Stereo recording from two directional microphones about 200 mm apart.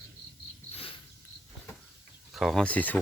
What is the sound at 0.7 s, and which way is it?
Cricket, 30° left (ahead or behind).